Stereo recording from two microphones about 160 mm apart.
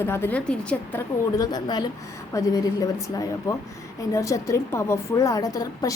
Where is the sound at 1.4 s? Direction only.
25° left (ahead or behind).